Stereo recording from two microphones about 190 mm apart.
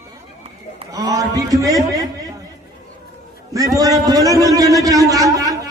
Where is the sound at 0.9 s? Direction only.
20° right (ahead or behind).